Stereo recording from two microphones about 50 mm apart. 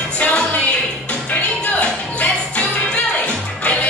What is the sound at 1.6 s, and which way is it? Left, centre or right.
Music, left.